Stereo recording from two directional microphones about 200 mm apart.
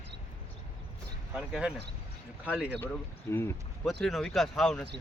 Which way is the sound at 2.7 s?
10° left (ahead or behind).